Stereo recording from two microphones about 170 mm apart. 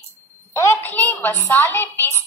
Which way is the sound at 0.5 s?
15° left (ahead or behind).